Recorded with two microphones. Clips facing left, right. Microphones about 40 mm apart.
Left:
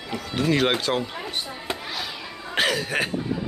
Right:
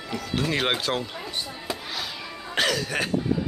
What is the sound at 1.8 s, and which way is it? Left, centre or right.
Cough, centre.